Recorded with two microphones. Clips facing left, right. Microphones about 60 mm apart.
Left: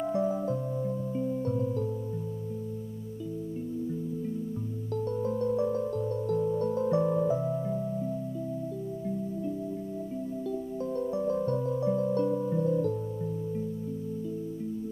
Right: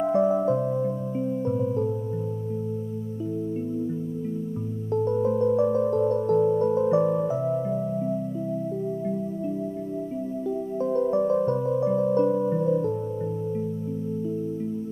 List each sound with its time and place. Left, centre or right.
0.0 s music: right
4.9 s music: right
10.8 s music: right